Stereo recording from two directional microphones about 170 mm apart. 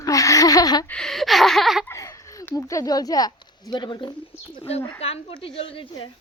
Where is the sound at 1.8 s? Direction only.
15° left (ahead or behind).